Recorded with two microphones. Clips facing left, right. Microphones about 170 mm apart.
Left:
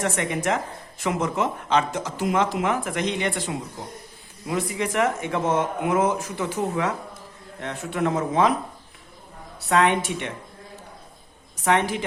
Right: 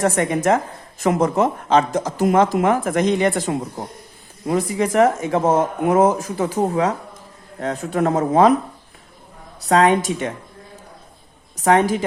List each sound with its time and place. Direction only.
0.0 s a woman's voice: 40° right (ahead or behind)
9.6 s a woman's voice: 40° right (ahead or behind)
11.6 s a woman's voice: 40° right (ahead or behind)